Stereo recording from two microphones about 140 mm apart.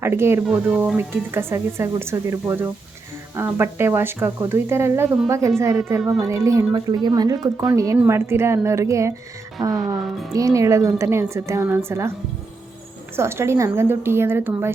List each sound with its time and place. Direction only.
0.0 s speech: 15° right (ahead or behind)
0.4 s a woman's voice: 5° right (ahead or behind); by 5.7 s 20° right (ahead or behind)
6.0 s speech: centre (ahead or behind)
6.2 s a woman's voice: 20° right (ahead or behind)
9.7 s speech: centre (ahead or behind)
10.3 s a woman's voice: 25° right (ahead or behind)
13.1 s speech: 20° right (ahead or behind)